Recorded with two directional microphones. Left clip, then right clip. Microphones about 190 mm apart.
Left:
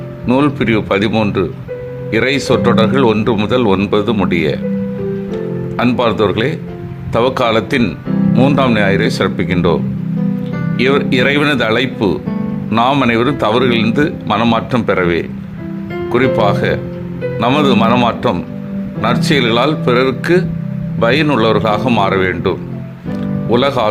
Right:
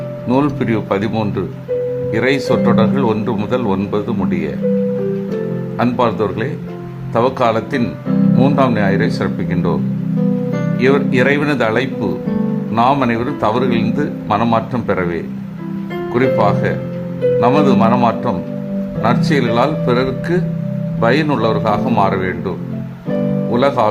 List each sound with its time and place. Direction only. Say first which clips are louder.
0.3 s speech: left 3 dB; 10° left (ahead or behind)
5.7 s speech: left 2 dB; 15° left (ahead or behind)